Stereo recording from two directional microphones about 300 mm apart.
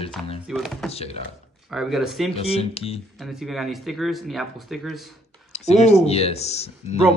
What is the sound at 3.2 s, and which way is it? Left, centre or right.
Speech, centre.